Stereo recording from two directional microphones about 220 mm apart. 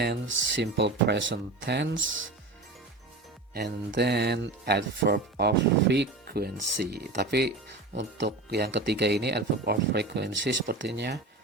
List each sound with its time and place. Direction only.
0.0 s speech: 50° right (ahead or behind)
3.5 s speech: 50° right (ahead or behind)